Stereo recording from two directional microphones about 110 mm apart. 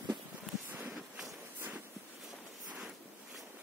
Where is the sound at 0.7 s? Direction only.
20° right (ahead or behind).